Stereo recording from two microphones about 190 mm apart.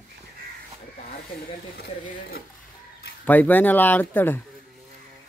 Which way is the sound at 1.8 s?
50° left (ahead or behind).